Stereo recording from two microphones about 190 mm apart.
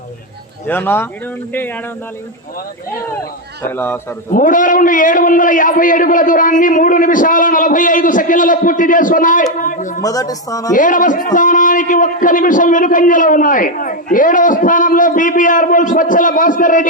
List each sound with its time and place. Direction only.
0.7 s speech: 10° left (ahead or behind)
3.7 s speech: 10° left (ahead or behind)
4.3 s a man's voice: 45° left (ahead or behind)
10.0 s speech: 20° left (ahead or behind)
10.8 s a man's voice: 45° left (ahead or behind)